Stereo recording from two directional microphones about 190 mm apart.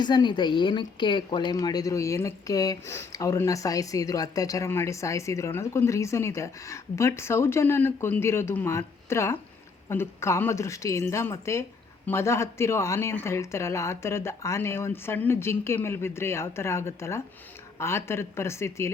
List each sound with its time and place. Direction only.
0.0 s a woman's voice: 25° left (ahead or behind)